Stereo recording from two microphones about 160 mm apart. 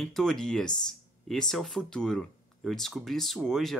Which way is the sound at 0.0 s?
5° left (ahead or behind).